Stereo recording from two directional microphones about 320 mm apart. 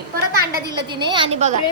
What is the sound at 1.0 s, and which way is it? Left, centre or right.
Speech, centre.